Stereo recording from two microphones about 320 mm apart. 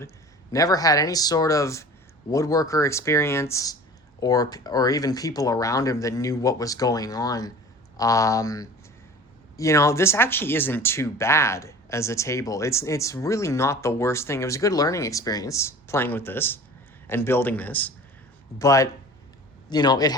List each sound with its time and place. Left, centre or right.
0.5 s speech: centre